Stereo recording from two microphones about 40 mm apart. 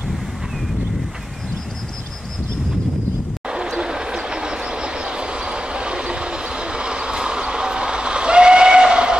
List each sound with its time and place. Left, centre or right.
3.4 s train: right